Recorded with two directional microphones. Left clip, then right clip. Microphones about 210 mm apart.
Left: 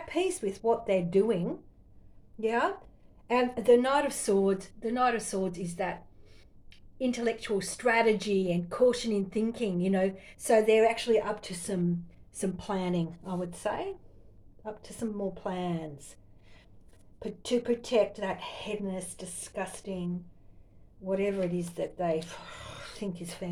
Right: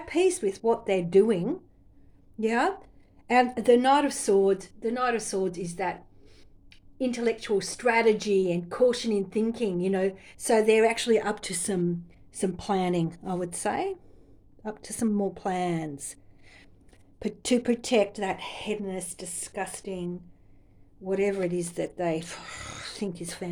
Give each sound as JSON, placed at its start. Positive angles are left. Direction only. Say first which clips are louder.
{"t": 0.1, "sound": "a woman's voice", "louder": "right 6 dB", "side_deg": -30}
{"t": 2.4, "sound": "a woman's voice", "louder": "right 3 dB", "side_deg": -45}
{"t": 12.3, "sound": "speech", "louder": "right 5 dB", "side_deg": -35}
{"t": 17.2, "sound": "speech", "louder": "right 4 dB", "side_deg": -50}
{"t": 21.1, "sound": "speech", "louder": "right 3 dB", "side_deg": -40}